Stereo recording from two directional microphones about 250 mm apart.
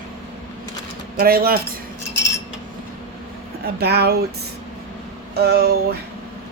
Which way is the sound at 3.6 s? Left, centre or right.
Right.